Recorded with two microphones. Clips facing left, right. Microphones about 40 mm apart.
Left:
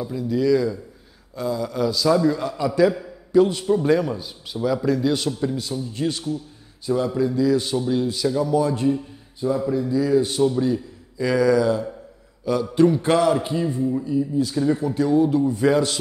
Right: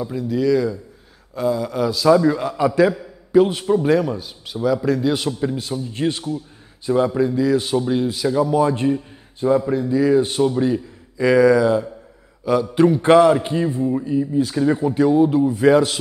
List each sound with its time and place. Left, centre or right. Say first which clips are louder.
0.3 s speech: right 1 dB; centre
1.3 s a man's voice: right 4 dB; right
4.0 s a man's voice: right 2 dB; centre
5.6 s a man's voice: right 2 dB; right; by 12.6 s centre
13.0 s a man's voice: right 6 dB; right
15.4 s a man's voice: right 4 dB; centre